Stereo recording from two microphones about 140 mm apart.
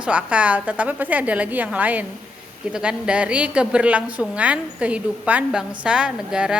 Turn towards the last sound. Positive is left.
turn(degrees=-5)  # may be behind; listen again after turning